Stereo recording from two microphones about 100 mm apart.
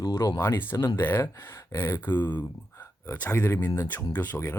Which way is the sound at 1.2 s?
35° left (ahead or behind).